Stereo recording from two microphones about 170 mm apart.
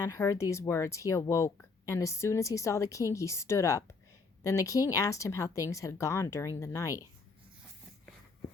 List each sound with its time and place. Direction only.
0.0 s a woman's voice: 15° left (ahead or behind)